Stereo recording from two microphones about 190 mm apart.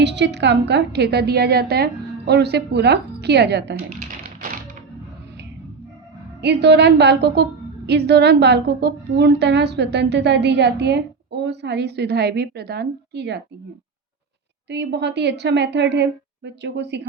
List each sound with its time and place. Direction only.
0.0 s a woman's voice: 65° right (ahead or behind)
6.4 s a woman's voice: 65° right (ahead or behind)
14.7 s a woman's voice: 65° right (ahead or behind)